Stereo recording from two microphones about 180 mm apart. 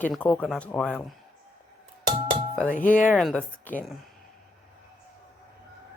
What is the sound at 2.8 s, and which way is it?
Speech, 45° left (ahead or behind).